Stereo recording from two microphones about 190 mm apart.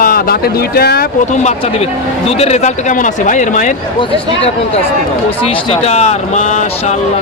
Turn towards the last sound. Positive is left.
turn(degrees=40)  # may be behind; listen again after turning